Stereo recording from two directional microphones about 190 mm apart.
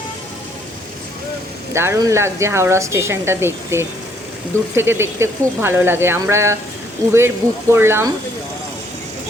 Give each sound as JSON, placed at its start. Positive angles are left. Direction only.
{"t": 1.7, "sound": "speech", "side_deg": -15}